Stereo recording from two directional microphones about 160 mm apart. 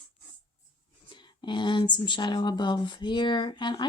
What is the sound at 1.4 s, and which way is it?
Speech, 30° left (ahead or behind).